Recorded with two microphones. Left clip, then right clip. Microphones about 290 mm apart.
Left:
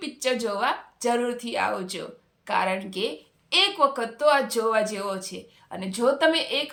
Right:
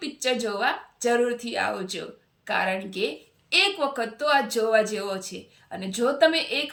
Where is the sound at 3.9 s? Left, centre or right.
Centre.